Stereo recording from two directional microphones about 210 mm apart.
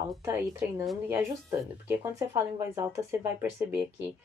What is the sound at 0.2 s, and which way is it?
Speech, 15° right (ahead or behind).